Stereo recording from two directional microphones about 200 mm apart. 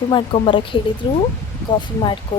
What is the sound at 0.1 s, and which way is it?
Speech, 25° left (ahead or behind).